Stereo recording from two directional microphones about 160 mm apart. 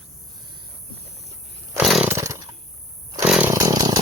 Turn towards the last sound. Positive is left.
turn(degrees=-20)  # may be behind; listen again after turning